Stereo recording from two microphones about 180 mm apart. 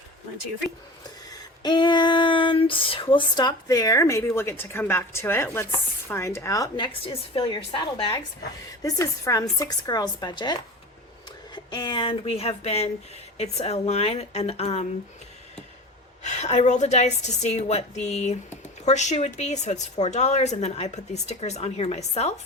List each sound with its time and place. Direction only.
1.3 s a woman's voice: 25° left (ahead or behind)
16.2 s a woman's voice: 40° left (ahead or behind)